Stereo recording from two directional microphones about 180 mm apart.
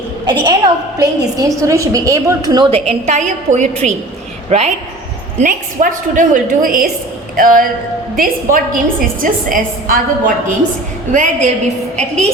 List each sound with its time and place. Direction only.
0.3 s a woman's voice: 25° right (ahead or behind)
5.4 s a woman's voice: 45° right (ahead or behind)